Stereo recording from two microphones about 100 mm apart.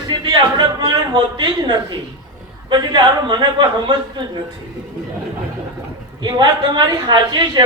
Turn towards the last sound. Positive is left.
turn(degrees=-45)  # may be behind; listen again after turning